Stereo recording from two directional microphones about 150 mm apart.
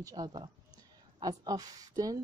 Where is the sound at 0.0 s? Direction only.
25° right (ahead or behind).